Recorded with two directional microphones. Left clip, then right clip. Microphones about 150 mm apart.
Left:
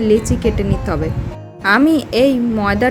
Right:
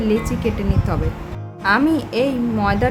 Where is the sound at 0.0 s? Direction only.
30° left (ahead or behind).